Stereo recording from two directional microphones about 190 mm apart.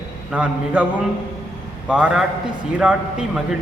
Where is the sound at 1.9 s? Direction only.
5° right (ahead or behind).